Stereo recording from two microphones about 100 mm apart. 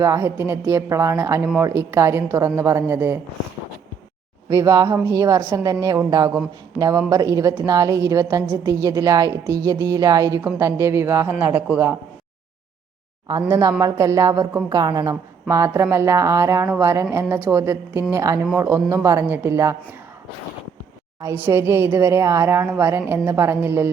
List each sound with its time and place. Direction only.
0.0 s speech: 25° right (ahead or behind)
4.4 s a woman's voice: 30° right (ahead or behind)
13.5 s a woman's voice: 35° right (ahead or behind)
21.3 s speech: 25° right (ahead or behind)